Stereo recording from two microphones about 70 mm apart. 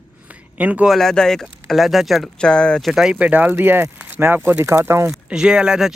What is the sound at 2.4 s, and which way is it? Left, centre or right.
Speech, centre.